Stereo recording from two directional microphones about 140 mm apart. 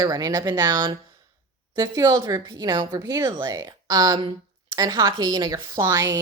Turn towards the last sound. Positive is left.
turn(degrees=-25)  # may be behind; listen again after turning